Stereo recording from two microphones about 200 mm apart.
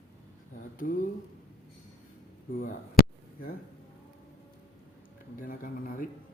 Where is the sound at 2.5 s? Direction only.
40° left (ahead or behind).